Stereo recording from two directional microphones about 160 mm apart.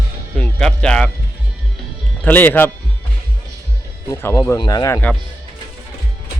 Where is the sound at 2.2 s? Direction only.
10° left (ahead or behind).